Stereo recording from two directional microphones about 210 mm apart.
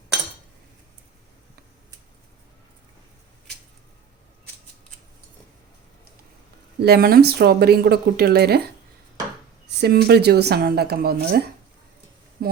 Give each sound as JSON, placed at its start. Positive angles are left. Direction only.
{"t": 6.7, "sound": "speech", "side_deg": -50}
{"t": 9.8, "sound": "speech", "side_deg": -50}